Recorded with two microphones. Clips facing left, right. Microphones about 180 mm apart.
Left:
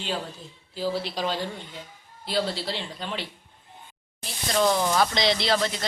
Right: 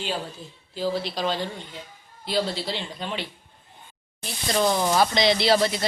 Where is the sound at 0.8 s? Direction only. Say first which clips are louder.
Right 1 dB; 10° left (ahead or behind).